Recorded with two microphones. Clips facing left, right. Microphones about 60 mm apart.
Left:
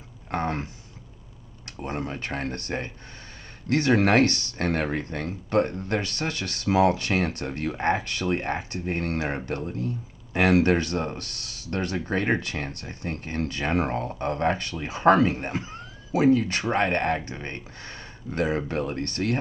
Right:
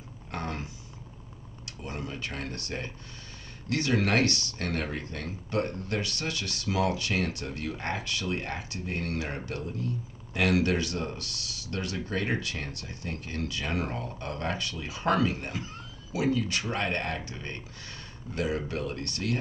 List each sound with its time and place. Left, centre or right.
0.3 s speech: left
1.8 s speech: left